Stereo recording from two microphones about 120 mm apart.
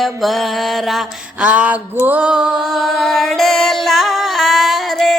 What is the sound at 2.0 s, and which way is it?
Music, 10° right (ahead or behind).